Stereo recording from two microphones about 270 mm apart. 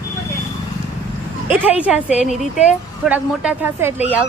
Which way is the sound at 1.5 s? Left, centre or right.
Centre.